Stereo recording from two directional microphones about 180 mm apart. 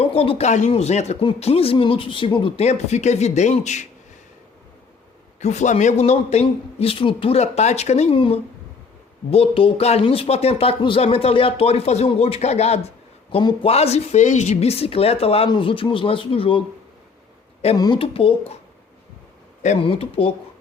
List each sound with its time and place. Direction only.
0.0 s speech: 30° left (ahead or behind)
5.4 s speech: 40° left (ahead or behind)
17.7 s speech: 25° left (ahead or behind)
19.6 s speech: 35° left (ahead or behind)